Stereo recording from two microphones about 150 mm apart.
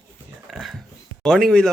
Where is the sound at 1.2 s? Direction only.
5° left (ahead or behind).